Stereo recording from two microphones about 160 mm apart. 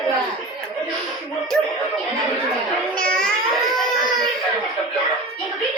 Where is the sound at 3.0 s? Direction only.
5° left (ahead or behind).